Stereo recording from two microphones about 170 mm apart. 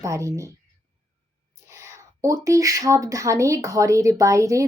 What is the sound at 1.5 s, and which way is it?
Speech, 15° right (ahead or behind).